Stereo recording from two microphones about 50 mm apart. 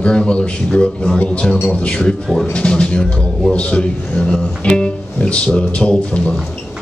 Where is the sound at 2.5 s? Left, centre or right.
Left.